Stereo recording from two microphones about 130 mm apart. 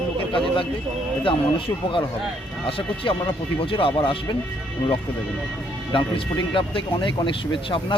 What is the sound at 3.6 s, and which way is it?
Speech, 45° left (ahead or behind).